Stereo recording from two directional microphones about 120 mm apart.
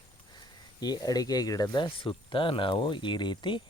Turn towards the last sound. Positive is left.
turn(degrees=40)  # may be behind; listen again after turning